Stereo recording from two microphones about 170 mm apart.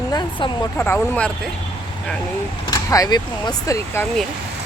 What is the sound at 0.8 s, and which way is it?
Speech, 10° left (ahead or behind).